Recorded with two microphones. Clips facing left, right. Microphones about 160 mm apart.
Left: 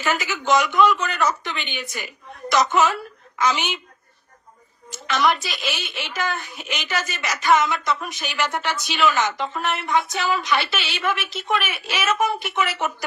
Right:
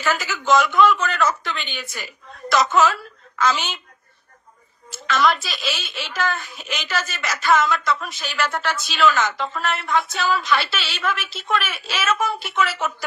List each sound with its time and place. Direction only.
0.0 s a woman's voice: 15° left (ahead or behind)
4.9 s a woman's voice: 15° left (ahead or behind)